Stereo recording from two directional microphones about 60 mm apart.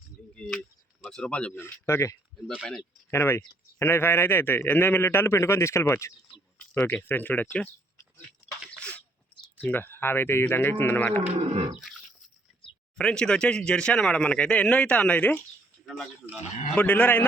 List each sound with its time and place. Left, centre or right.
1.0 s speech: centre
1.9 s a man's voice: left
5.0 s speech: left
6.8 s a man's voice: left
8.7 s a sound: centre
9.6 s a man's voice: left
11.8 s a sound: centre
13.0 s a man's voice: centre; by 17.2 s left